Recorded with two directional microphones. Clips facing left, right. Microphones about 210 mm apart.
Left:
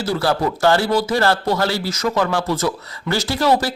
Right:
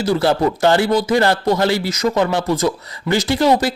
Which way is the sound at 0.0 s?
20° right (ahead or behind).